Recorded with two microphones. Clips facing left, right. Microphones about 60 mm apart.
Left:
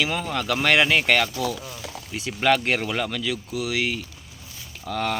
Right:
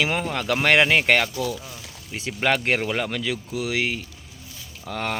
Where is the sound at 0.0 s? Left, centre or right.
Right.